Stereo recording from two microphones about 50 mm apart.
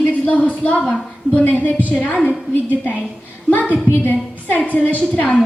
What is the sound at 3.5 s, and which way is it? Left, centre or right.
A woman's voice, left.